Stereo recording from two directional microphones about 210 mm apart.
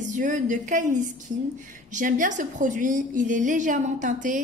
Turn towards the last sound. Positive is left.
turn(degrees=-40)  # may be behind; listen again after turning